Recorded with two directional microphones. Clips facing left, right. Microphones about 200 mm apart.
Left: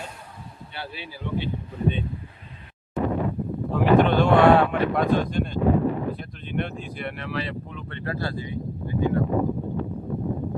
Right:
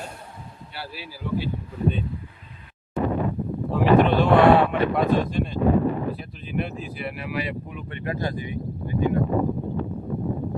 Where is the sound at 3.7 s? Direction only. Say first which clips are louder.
Right 1 dB; centre (ahead or behind); by 8.4 s 15° right (ahead or behind).